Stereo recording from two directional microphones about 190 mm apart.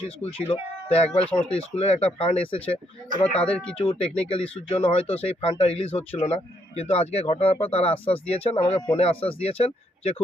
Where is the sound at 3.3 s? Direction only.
5° left (ahead or behind).